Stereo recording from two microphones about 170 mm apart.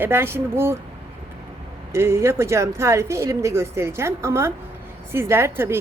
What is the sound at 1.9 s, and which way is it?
A woman's voice, 15° right (ahead or behind).